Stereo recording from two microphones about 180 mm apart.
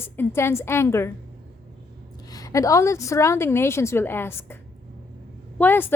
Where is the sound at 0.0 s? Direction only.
10° left (ahead or behind).